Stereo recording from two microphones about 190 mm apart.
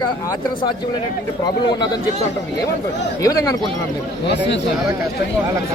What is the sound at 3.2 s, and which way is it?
Speech, 20° left (ahead or behind).